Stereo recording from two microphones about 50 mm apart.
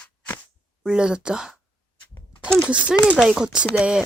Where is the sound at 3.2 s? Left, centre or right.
Centre.